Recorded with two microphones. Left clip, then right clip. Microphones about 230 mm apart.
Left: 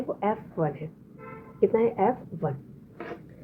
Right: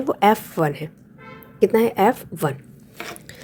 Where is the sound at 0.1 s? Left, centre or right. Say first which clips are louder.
Right 13 dB; right.